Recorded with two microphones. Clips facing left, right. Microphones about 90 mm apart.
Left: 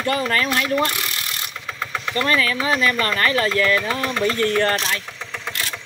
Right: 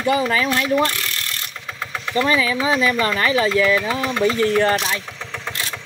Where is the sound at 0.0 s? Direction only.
10° right (ahead or behind).